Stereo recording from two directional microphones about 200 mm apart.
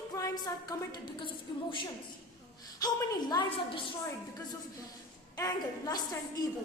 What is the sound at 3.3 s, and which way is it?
Speech, 25° left (ahead or behind).